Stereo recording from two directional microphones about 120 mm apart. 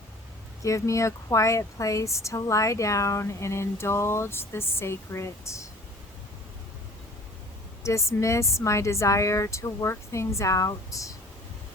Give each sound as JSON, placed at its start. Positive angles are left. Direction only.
{"t": 0.6, "sound": "a woman's voice", "side_deg": 25}
{"t": 7.9, "sound": "a woman's voice", "side_deg": 25}